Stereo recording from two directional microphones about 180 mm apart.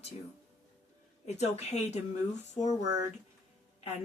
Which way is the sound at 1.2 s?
35° left (ahead or behind).